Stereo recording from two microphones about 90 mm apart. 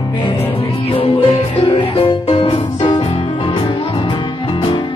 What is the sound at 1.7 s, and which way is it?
Music, 65° left (ahead or behind).